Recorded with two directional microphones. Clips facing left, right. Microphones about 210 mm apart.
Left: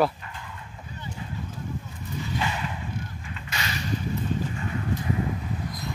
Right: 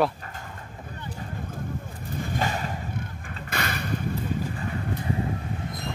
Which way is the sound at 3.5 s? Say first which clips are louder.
Right 2 dB; 55° right (ahead or behind).